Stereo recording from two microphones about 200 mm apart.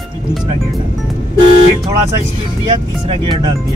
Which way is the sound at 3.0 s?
25° right (ahead or behind).